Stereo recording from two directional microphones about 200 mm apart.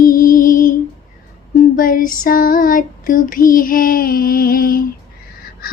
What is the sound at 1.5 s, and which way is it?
Female singing, 45° left (ahead or behind).